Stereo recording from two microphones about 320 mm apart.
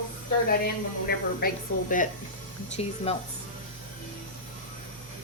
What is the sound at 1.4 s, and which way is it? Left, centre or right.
Speech, left.